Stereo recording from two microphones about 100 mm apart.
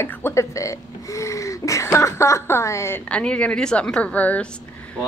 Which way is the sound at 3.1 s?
10° left (ahead or behind).